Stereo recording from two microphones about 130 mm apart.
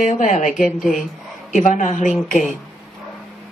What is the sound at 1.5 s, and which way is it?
Speech, 75° left (ahead or behind).